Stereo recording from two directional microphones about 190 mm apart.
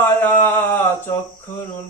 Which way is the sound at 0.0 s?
10° left (ahead or behind).